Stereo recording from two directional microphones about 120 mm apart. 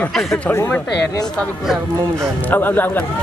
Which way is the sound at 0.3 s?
20° left (ahead or behind).